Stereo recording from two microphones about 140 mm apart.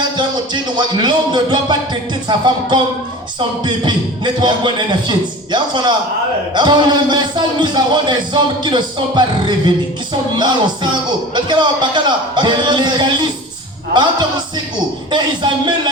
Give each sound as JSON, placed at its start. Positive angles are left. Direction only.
{"t": 0.2, "sound": "a man's voice", "side_deg": -35}
{"t": 4.4, "sound": "a man's voice", "side_deg": -35}
{"t": 10.3, "sound": "a man's voice", "side_deg": -30}